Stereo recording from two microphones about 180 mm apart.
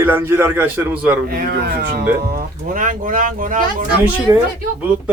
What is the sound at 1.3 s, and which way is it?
Speech, 55° right (ahead or behind).